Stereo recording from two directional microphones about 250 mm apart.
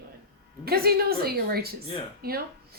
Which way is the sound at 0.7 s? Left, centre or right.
Right.